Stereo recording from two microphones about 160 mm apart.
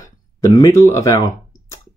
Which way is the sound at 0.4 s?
20° left (ahead or behind).